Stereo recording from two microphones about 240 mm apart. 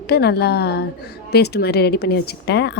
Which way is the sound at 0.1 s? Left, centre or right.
Left.